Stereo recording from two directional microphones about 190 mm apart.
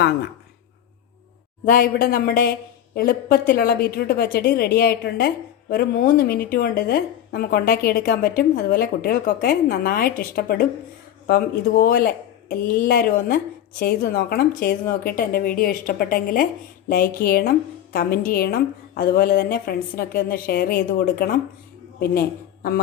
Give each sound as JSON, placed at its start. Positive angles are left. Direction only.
{"t": 1.6, "sound": "speech", "side_deg": 50}